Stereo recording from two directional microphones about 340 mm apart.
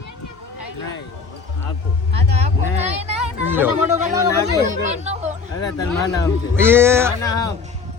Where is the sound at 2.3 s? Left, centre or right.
Centre.